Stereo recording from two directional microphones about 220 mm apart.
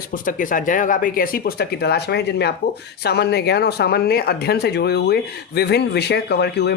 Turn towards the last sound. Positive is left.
turn(degrees=50)  # may be behind; listen again after turning